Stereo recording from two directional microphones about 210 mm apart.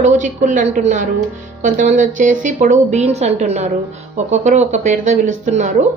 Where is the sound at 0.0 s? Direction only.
35° right (ahead or behind).